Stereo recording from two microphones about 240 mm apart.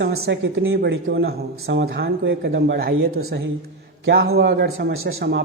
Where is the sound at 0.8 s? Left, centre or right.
Right.